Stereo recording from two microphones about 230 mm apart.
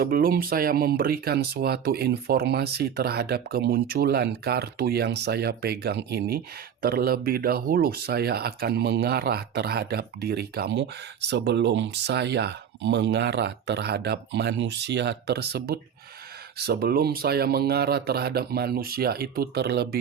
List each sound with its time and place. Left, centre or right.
0.0 s speech: right